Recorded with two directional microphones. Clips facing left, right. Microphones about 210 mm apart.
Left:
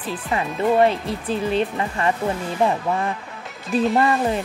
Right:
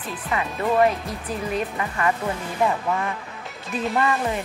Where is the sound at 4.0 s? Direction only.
35° left (ahead or behind).